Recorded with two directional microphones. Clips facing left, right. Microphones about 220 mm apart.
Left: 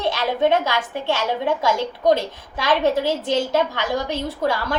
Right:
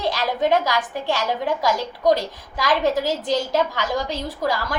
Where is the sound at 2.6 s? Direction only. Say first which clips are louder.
Left 1 dB; 25° left (ahead or behind).